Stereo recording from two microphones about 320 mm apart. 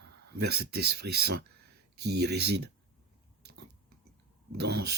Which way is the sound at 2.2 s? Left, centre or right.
Right.